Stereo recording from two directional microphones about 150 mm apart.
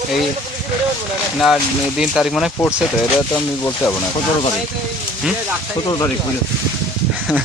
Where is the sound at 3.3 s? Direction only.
10° left (ahead or behind).